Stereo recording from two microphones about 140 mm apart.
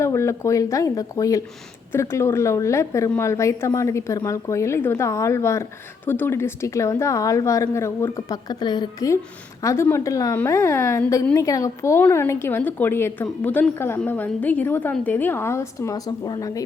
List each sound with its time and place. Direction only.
0.0 s a woman's voice: 20° left (ahead or behind)